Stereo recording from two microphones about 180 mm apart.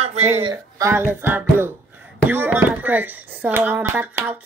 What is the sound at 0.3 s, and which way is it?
Speech, 30° right (ahead or behind).